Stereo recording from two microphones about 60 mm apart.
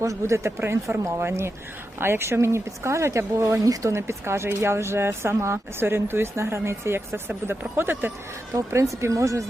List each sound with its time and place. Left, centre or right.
0.0 s speech: right
3.6 s speech: right
3.9 s speech: right
8.5 s speech: right